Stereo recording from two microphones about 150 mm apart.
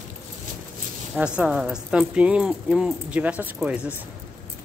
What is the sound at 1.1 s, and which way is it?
Speech, 5° right (ahead or behind).